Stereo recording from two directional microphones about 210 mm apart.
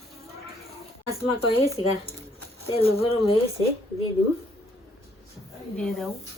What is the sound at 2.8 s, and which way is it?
Speech, 25° left (ahead or behind).